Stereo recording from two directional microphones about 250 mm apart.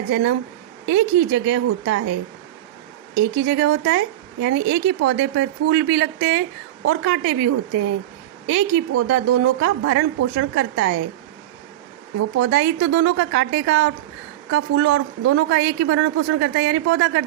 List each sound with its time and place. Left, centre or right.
0.1 s speech: right
3.3 s speech: right
12.4 s speech: right